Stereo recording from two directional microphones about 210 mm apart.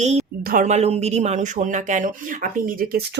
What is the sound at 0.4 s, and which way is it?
Speech, 35° right (ahead or behind).